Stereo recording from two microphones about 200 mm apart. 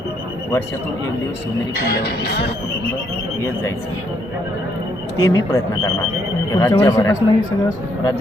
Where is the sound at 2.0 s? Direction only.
55° left (ahead or behind).